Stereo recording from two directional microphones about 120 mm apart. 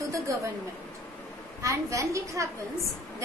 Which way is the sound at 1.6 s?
25° right (ahead or behind).